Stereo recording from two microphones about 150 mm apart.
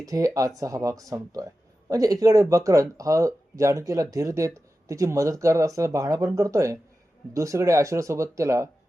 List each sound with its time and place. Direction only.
0.0 s speech: 25° right (ahead or behind)